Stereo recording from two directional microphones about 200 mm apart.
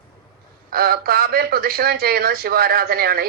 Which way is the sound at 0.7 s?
50° right (ahead or behind).